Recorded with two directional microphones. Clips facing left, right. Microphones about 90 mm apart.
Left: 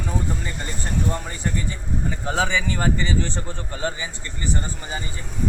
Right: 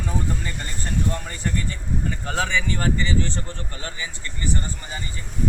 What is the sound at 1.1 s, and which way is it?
Speech, 10° left (ahead or behind).